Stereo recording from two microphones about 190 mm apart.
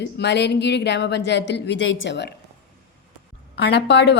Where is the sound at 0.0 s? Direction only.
65° left (ahead or behind).